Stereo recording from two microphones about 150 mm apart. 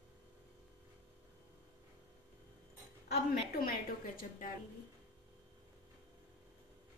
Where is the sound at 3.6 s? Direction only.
70° left (ahead or behind).